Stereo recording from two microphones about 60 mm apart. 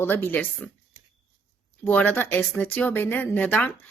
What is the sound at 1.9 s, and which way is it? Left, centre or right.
Speech, left.